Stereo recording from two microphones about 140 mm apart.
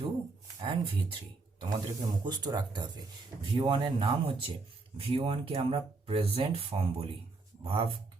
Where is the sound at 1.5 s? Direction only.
30° right (ahead or behind).